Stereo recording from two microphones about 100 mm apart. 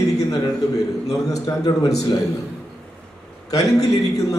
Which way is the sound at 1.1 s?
35° left (ahead or behind).